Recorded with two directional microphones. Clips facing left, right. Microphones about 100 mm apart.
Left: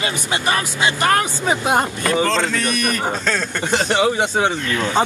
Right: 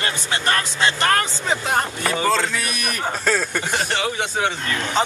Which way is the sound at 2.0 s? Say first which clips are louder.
Left 2 dB; 10° right (ahead or behind).